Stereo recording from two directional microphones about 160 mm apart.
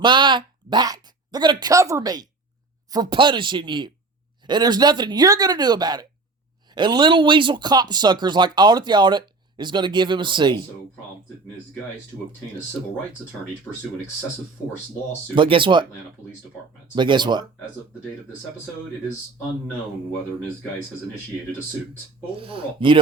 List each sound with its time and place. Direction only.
0.0 s speech: 30° right (ahead or behind)
15.4 s speech: 30° right (ahead or behind)
16.9 s speech: 30° right (ahead or behind)
22.4 s speech: 35° right (ahead or behind)